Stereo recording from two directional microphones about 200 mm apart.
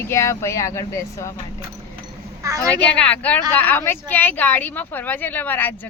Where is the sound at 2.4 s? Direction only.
15° right (ahead or behind).